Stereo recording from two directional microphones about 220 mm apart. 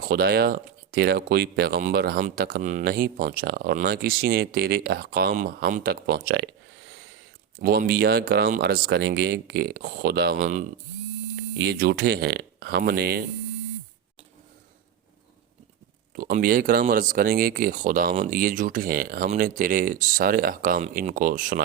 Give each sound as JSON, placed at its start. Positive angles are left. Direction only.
{"t": 0.0, "sound": "speech", "side_deg": -45}
{"t": 16.1, "sound": "speech", "side_deg": -40}